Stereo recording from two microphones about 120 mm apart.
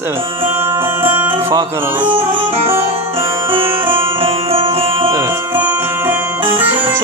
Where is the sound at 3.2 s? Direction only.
25° right (ahead or behind).